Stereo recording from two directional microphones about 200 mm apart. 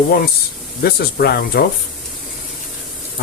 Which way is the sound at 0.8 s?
50° left (ahead or behind).